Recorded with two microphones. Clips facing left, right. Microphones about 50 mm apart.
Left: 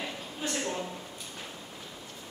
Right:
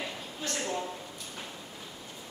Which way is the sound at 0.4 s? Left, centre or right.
Centre.